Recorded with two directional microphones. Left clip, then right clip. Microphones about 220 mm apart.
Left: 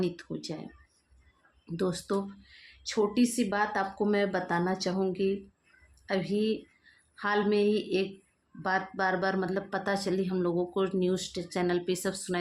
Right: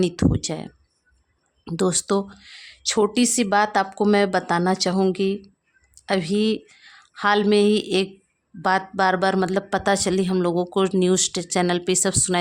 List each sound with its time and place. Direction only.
0.0 s speech: 45° right (ahead or behind)
1.6 s speech: 50° right (ahead or behind)